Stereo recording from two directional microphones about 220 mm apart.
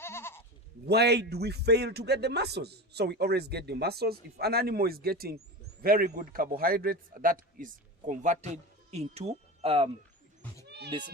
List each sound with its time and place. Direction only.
0.0 s bleat: 10° left (ahead or behind)
0.9 s a man's voice: 50° right (ahead or behind); by 9.9 s 25° right (ahead or behind)
10.7 s cat: 50° right (ahead or behind)